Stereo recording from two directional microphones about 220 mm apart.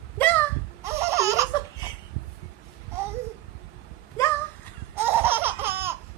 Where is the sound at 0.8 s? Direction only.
10° right (ahead or behind).